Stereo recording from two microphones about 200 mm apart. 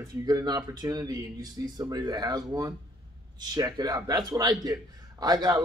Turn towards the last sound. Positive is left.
turn(degrees=-20)  # may be behind; listen again after turning